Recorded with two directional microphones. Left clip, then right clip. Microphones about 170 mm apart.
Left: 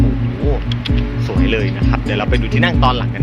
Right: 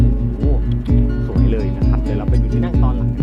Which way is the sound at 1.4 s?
Centre (ahead or behind).